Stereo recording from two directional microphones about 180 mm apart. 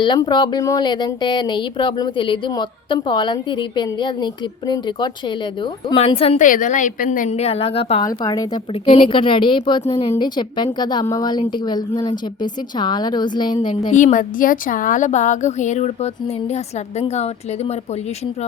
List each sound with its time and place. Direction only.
0.0 s a woman's voice: 25° left (ahead or behind)
6.4 s a woman's voice: 45° left (ahead or behind)
8.0 s speech: 20° left (ahead or behind)
13.9 s a woman's voice: 45° left (ahead or behind)